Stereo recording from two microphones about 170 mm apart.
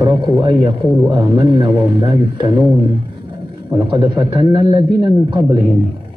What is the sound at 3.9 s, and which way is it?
Speech, 25° right (ahead or behind).